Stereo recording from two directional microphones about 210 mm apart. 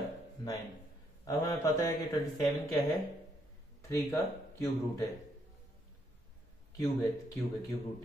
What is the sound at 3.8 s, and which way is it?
Speech, 15° left (ahead or behind).